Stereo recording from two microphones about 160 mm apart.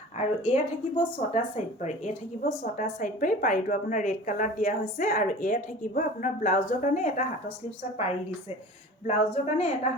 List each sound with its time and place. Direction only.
0.2 s a woman's voice: 45° left (ahead or behind)
2.4 s a woman's voice: 65° left (ahead or behind)
7.9 s a woman's voice: 40° left (ahead or behind)